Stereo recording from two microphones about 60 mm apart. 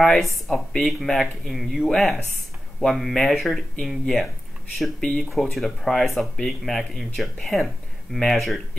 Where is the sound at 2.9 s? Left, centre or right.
Centre.